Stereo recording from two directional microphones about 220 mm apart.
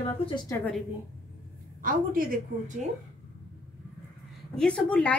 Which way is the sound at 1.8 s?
40° right (ahead or behind).